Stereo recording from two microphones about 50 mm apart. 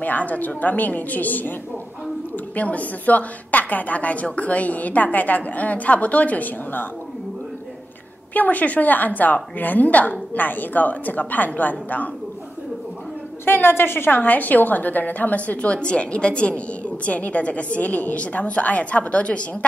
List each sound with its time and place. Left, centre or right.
0.0 s a woman's voice: left
8.3 s a woman's voice: left
13.5 s a woman's voice: left